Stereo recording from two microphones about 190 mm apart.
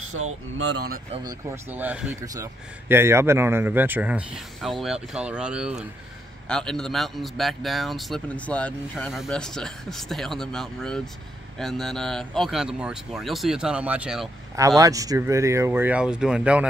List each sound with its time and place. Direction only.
0.2 s speech: 90° right
1.2 s a man's voice: 10° right (ahead or behind)
14.8 s a man's voice: 15° right (ahead or behind)